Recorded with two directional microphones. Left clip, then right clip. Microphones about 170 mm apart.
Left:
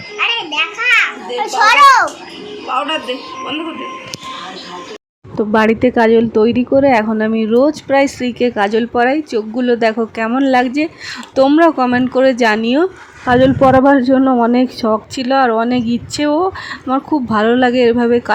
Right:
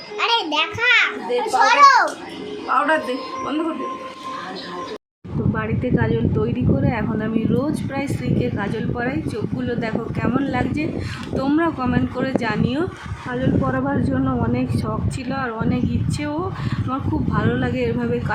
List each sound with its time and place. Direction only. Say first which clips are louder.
0.2 s a sound: left 3 dB; 65° right (ahead or behind)
1.6 s a child's voice: left 5 dB; 15° left (ahead or behind)
5.5 s speech: left 13 dB; 50° left (ahead or behind)